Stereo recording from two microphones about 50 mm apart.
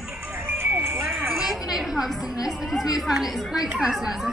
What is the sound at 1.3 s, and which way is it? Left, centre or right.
A woman's voice, centre.